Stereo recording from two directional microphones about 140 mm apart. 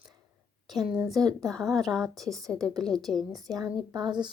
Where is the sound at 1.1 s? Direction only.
25° right (ahead or behind).